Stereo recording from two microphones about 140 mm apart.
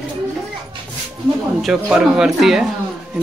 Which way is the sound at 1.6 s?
5° right (ahead or behind).